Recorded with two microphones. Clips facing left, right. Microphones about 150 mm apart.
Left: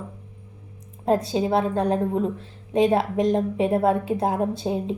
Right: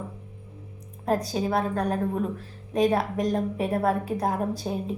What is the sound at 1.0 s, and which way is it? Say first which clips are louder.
A woman's voice: left 4 dB; 25° left (ahead or behind).